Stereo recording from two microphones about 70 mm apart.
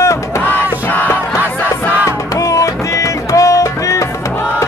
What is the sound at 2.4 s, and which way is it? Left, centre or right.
Music, left.